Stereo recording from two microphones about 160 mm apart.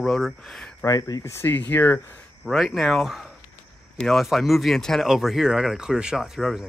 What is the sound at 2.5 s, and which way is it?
Speech, centre (ahead or behind).